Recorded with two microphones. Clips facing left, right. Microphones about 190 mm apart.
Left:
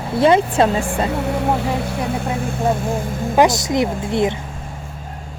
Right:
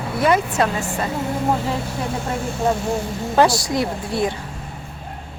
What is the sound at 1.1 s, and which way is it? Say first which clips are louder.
Speech: left 3 dB; 70° left (ahead or behind).